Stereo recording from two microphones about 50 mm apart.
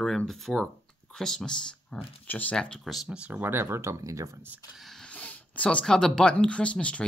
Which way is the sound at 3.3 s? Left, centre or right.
Right.